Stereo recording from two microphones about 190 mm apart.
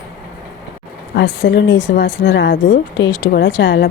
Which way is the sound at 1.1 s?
75° left (ahead or behind).